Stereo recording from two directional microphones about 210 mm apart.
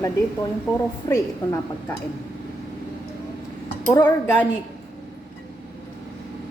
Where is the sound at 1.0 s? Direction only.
15° left (ahead or behind).